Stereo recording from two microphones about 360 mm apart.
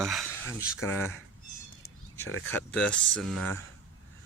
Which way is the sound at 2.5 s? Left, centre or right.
Centre.